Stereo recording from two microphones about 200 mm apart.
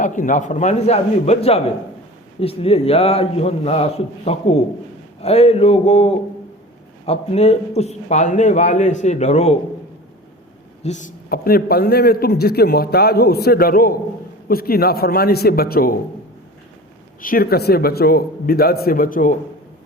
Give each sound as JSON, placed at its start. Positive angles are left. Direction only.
{"t": 0.0, "sound": "a man's voice", "side_deg": 40}
{"t": 10.8, "sound": "a man's voice", "side_deg": 40}
{"t": 17.2, "sound": "a man's voice", "side_deg": 45}